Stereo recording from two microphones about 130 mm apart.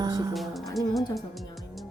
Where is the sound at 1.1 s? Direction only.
Centre (ahead or behind).